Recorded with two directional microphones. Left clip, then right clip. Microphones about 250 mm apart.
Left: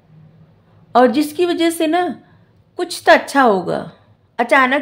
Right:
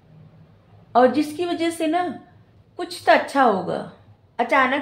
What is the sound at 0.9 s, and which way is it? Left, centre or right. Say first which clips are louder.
A woman's voice: left 4 dB; left.